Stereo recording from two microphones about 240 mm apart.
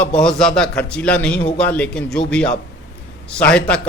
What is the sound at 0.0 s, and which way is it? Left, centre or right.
A man's voice, centre.